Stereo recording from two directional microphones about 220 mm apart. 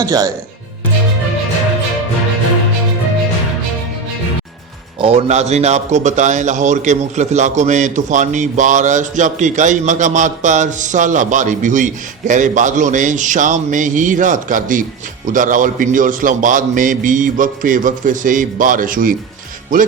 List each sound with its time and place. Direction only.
0.0 s speech: 15° right (ahead or behind)
4.9 s a man's voice: 30° right (ahead or behind)